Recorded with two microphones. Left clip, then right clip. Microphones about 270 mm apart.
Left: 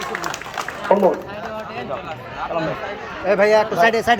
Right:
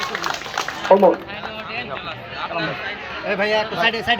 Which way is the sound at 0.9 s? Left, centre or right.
Centre.